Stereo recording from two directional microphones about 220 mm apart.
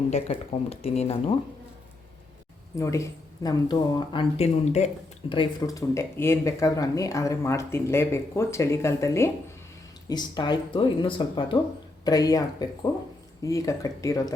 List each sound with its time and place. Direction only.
0.1 s speech: 30° left (ahead or behind)
2.7 s speech: 15° left (ahead or behind)